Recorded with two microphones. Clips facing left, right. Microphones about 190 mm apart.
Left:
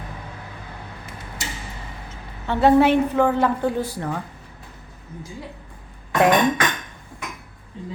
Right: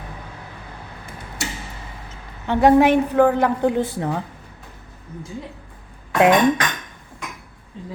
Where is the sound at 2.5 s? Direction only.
15° right (ahead or behind).